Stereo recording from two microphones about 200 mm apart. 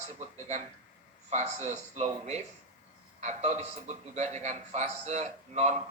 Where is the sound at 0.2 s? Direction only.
35° right (ahead or behind).